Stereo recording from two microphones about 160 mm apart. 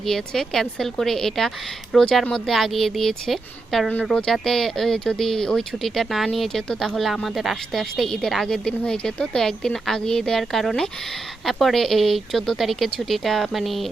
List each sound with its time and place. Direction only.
0.0 s a woman's voice: centre (ahead or behind)